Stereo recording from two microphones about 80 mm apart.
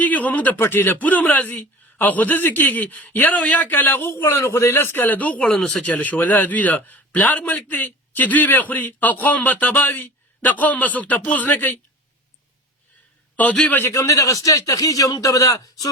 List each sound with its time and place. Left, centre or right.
0.0 s speech: left
13.3 s a man's voice: centre
13.9 s a man's voice: left